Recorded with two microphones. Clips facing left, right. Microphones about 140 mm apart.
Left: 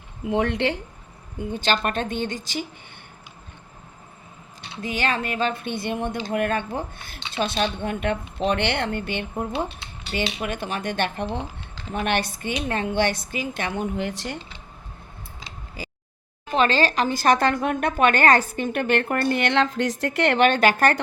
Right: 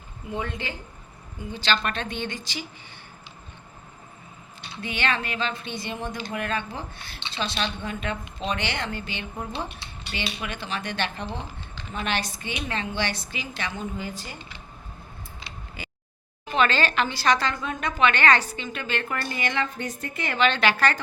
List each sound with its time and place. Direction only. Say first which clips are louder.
0.3 s speech: left 9 dB; 85° left
1.4 s speech: left 3 dB; 50° left (ahead or behind)
4.8 s a woman's voice: left 3 dB; 40° left (ahead or behind)
11.3 s a sound: left 5 dB; 15° left (ahead or behind)
11.9 s speech: left 5 dB; 55° left (ahead or behind); by 14.3 s 75° left (ahead or behind)
15.8 s a sound: left 5 dB; 35° left (ahead or behind)
16.5 s a woman's voice: left 3 dB; 35° left (ahead or behind); by 20.5 s 70° left (ahead or behind)
20.5 s speech: left 4 dB; 45° left (ahead or behind)